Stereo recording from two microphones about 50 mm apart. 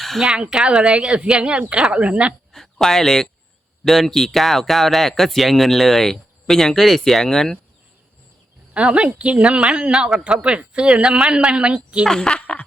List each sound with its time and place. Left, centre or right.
0.2 s speech: centre
0.9 s a woman's voice: right
2.5 s speech: centre
8.7 s a woman's voice: right
12.0 s speech: centre